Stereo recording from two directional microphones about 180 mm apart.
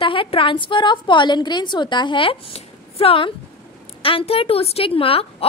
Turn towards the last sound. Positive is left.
turn(degrees=30)  # may be behind; listen again after turning